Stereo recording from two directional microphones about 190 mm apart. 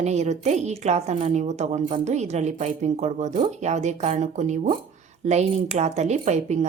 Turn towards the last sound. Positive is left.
turn(degrees=-40)  # may be behind; listen again after turning